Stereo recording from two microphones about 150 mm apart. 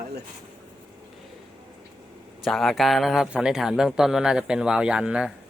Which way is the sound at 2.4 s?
Centre (ahead or behind).